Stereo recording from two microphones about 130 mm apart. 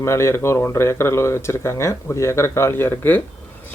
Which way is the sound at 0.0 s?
20° left (ahead or behind).